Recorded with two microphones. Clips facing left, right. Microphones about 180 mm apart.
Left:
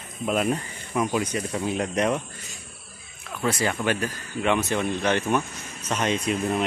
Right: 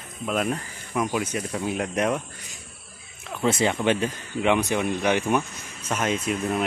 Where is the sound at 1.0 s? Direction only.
5° right (ahead or behind).